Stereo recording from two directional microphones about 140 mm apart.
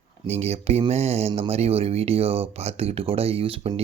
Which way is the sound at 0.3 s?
50° right (ahead or behind).